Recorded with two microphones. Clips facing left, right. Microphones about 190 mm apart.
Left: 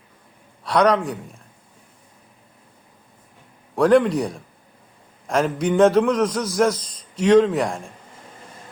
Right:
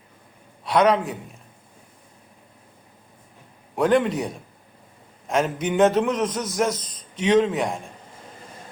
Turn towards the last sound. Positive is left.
turn(degrees=0)  # may be behind; listen again after turning